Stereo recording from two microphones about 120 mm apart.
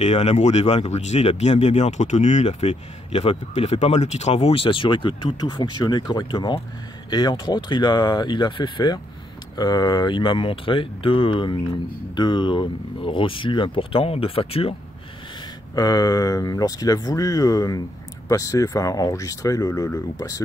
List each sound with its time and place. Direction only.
0.0 s speech: 65° left (ahead or behind)
3.8 s speech: 70° left (ahead or behind); by 14.8 s 55° left (ahead or behind)
15.7 s speech: 30° left (ahead or behind)